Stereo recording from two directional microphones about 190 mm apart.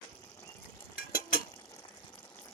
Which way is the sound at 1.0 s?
50° left (ahead or behind).